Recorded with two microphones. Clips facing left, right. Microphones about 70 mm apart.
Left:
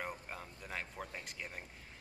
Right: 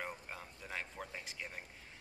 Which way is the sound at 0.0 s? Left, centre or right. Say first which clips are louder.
Left 1 dB; centre.